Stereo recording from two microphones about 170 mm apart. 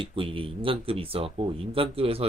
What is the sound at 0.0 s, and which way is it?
Speech, 30° right (ahead or behind).